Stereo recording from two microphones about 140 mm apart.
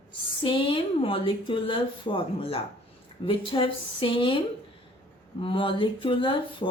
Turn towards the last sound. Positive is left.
turn(degrees=35)  # may be behind; listen again after turning